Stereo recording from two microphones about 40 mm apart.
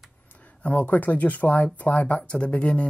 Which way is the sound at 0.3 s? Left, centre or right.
Left.